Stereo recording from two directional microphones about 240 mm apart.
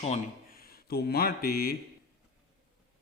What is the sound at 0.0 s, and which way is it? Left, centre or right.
Speech, left.